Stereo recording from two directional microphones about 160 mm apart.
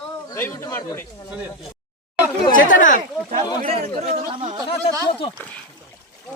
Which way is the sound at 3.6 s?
45° right (ahead or behind).